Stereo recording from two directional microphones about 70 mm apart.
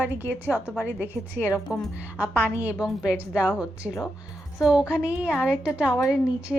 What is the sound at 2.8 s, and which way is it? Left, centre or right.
A woman's voice, centre.